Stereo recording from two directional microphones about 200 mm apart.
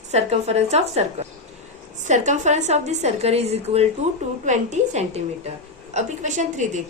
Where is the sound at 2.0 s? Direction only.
35° right (ahead or behind).